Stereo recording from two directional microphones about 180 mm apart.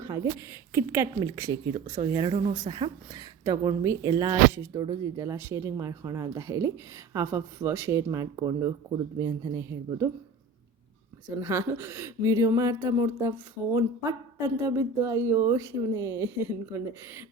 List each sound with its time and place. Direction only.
0.0 s speech: 15° right (ahead or behind)
11.3 s speech: 15° right (ahead or behind)